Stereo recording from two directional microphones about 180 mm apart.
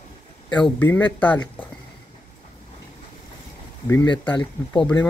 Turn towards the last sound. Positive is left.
turn(degrees=25)  # may be behind; listen again after turning